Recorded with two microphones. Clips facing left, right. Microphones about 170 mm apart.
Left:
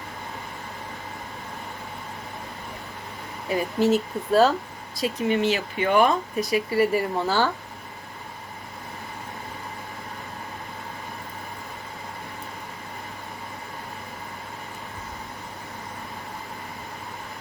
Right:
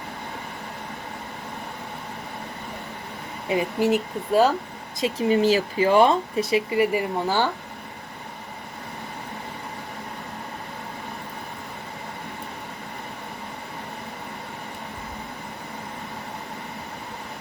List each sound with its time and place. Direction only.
3.5 s speech: 15° right (ahead or behind)
4.9 s speech: 25° right (ahead or behind)